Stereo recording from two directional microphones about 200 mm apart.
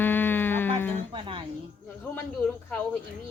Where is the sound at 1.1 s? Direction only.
25° right (ahead or behind).